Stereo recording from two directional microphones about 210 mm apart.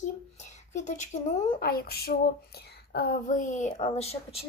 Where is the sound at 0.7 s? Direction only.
35° left (ahead or behind).